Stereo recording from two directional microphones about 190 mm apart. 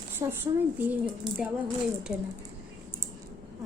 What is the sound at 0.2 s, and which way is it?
Speech, 20° right (ahead or behind).